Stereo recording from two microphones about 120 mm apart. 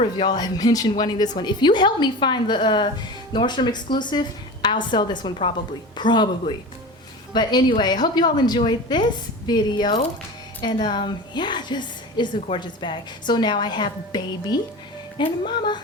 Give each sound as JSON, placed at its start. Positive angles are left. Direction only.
{"t": 0.0, "sound": "a woman's voice", "side_deg": 40}
{"t": 7.3, "sound": "a woman's voice", "side_deg": 35}